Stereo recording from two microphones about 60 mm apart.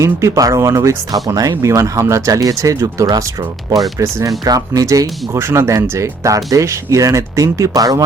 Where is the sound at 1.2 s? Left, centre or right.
Right.